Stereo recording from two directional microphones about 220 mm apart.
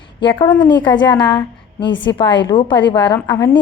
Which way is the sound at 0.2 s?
20° left (ahead or behind).